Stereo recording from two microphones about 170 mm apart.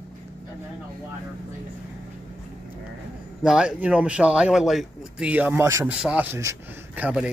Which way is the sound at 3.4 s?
5° right (ahead or behind).